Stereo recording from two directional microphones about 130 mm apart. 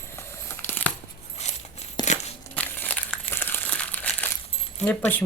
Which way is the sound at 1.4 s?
55° left (ahead or behind).